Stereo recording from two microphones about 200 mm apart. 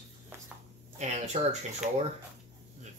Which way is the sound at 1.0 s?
35° right (ahead or behind).